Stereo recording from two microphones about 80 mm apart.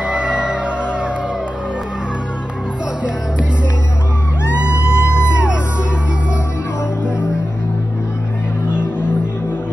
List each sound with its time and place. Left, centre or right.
0.0 s music: centre
4.6 s music: centre